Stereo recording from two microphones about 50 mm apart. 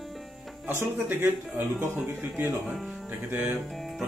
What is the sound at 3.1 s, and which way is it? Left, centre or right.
Speech, right.